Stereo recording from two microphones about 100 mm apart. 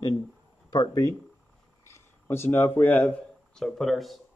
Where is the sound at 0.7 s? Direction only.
35° left (ahead or behind).